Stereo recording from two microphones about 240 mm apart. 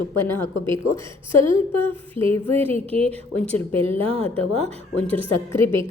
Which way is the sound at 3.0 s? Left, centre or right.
Centre.